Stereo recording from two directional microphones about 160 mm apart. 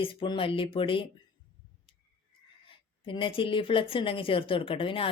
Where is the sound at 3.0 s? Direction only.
30° left (ahead or behind).